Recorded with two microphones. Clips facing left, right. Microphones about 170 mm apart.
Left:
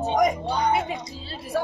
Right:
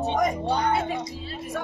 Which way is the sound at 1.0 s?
30° left (ahead or behind).